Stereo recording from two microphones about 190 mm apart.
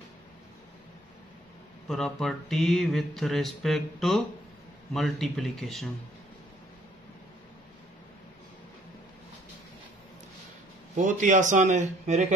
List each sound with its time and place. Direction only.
1.9 s mantra: 5° left (ahead or behind)
11.0 s speech: 40° right (ahead or behind)